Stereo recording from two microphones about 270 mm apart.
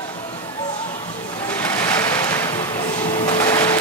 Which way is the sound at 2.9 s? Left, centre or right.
Centre.